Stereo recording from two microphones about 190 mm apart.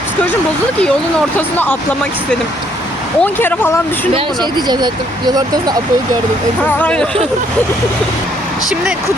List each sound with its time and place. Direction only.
1.4 s speech: 10° left (ahead or behind)
3.2 s speech: 10° left (ahead or behind)
4.1 s speech: 20° right (ahead or behind)
6.7 s speech: 5° left (ahead or behind)